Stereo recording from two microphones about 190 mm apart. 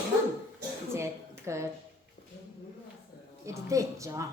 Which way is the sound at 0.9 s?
15° right (ahead or behind).